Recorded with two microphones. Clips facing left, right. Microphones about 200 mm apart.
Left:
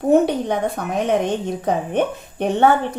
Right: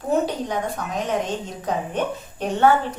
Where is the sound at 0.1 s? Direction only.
60° left (ahead or behind).